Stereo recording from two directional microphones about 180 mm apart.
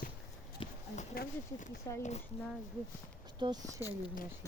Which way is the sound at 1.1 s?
55° left (ahead or behind).